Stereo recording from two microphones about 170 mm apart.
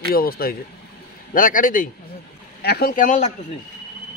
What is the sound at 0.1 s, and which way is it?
Speech, 60° left (ahead or behind).